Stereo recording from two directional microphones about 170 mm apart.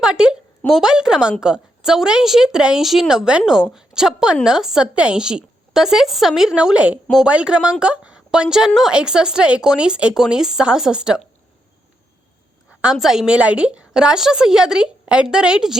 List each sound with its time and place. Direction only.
0.0 s a woman's voice: 5° right (ahead or behind)
12.8 s a woman's voice: 5° right (ahead or behind)